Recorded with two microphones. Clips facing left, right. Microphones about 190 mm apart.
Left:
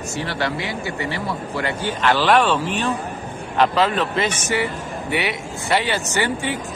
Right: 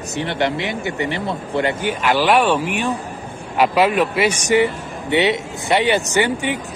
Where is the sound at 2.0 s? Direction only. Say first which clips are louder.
Right 1 dB; 10° right (ahead or behind).